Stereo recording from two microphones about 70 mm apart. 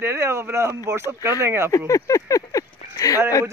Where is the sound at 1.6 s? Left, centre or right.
Left.